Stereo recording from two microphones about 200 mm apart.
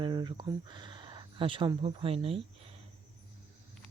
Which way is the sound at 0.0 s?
25° right (ahead or behind).